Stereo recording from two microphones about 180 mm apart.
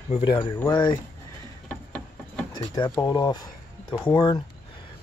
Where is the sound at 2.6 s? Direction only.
20° left (ahead or behind).